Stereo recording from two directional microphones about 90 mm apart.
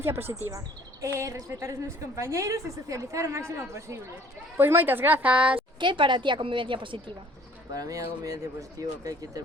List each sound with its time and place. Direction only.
0.0 s a woman's voice: 25° right (ahead or behind)
5.8 s a woman's voice: 60° right (ahead or behind)
7.8 s a woman's voice: 40° right (ahead or behind)